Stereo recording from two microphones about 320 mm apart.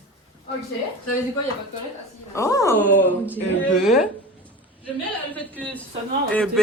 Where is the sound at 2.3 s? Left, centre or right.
Centre.